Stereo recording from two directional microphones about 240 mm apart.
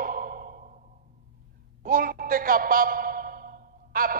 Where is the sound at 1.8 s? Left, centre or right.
Right.